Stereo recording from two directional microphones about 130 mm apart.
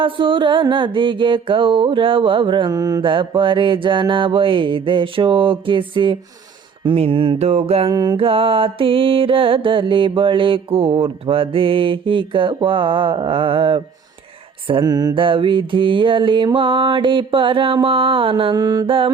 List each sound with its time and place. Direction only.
0.0 s music: 40° right (ahead or behind)
7.9 s music: 40° right (ahead or behind)